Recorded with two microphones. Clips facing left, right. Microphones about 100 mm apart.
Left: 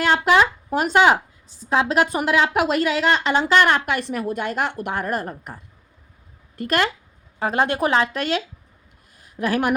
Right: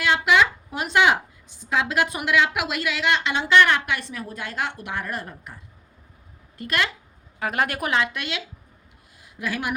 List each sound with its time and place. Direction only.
0.0 s a woman's voice: 40° left (ahead or behind)
6.6 s speech: 45° left (ahead or behind)
7.3 s a woman's voice: 30° left (ahead or behind); by 9.7 s 50° left (ahead or behind)